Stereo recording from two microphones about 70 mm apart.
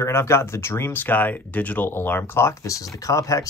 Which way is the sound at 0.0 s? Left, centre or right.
Left.